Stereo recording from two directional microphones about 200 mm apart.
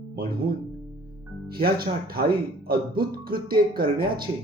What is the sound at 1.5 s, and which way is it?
Speech, 50° right (ahead or behind).